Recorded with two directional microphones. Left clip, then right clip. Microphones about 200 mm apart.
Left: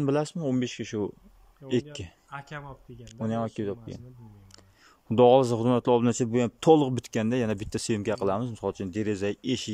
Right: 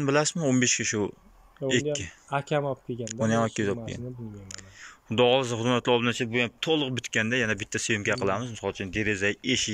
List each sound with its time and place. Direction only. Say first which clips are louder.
0.0 s speech: right 3 dB; 15° left (ahead or behind)
2.3 s speech: right 13 dB; 50° right (ahead or behind)
3.1 s speech: right 5 dB; 10° left (ahead or behind)
5.1 s speech: left 3 dB; 25° left (ahead or behind)